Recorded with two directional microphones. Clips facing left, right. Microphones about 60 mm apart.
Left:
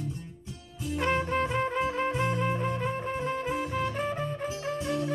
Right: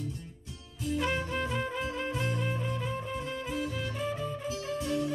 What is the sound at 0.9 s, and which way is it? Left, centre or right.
Music, left.